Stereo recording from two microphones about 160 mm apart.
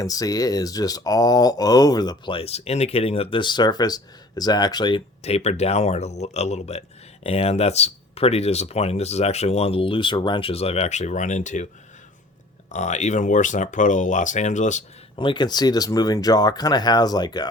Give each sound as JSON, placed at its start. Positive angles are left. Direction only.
{"t": 0.0, "sound": "speech", "side_deg": 20}
{"t": 12.7, "sound": "speech", "side_deg": 45}
{"t": 15.1, "sound": "speech", "side_deg": 30}